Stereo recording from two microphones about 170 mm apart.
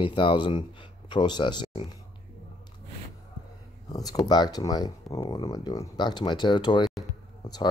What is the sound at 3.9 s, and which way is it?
Speech, 20° left (ahead or behind).